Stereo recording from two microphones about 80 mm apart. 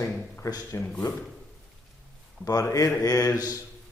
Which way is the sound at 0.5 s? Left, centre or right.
Left.